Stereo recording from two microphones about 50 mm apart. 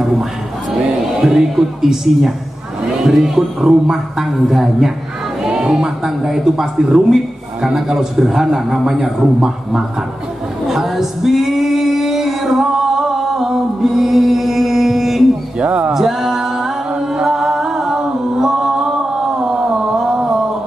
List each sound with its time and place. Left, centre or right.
0.0 s music: centre
1.2 s a man's voice: centre
5.4 s a man's voice: centre
10.7 s female singing: centre
15.6 s speech: right
15.9 s music: centre
20.0 s a sound: centre